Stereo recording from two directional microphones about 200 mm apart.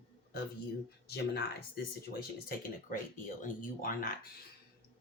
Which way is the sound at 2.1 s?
45° left (ahead or behind).